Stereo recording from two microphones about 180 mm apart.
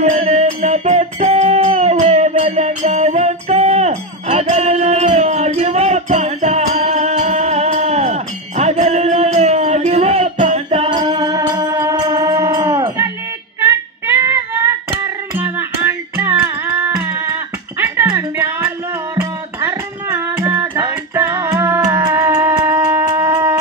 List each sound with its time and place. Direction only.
0.0 s music: 40° right (ahead or behind); by 13.1 s 20° right (ahead or behind)
13.6 s child singing: 15° right (ahead or behind)
15.3 s music: 10° right (ahead or behind)